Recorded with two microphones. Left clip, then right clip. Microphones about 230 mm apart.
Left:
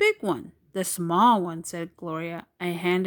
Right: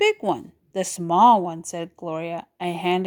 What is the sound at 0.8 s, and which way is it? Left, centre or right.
Speech, left.